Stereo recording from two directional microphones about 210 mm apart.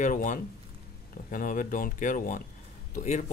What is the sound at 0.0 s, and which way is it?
Speech, 40° left (ahead or behind).